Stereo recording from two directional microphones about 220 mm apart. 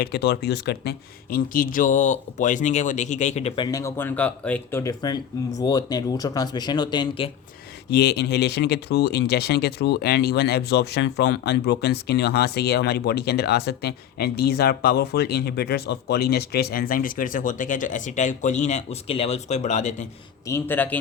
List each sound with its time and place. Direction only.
0.0 s speech: 50° left (ahead or behind); by 7.3 s 20° left (ahead or behind)
7.9 s speech: 45° left (ahead or behind)
20.5 s speech: 10° left (ahead or behind)